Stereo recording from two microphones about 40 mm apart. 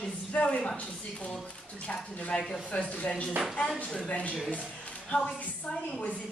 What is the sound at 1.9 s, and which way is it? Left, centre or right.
Speech, left.